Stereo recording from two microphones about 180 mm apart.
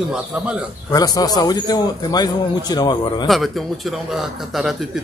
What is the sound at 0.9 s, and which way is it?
A man's voice, 20° left (ahead or behind).